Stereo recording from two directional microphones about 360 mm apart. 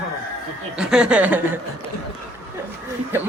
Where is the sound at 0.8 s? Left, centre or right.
Centre.